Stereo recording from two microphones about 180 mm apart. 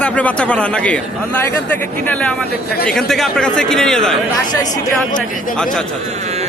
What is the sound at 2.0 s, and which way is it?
Speech, 5° left (ahead or behind).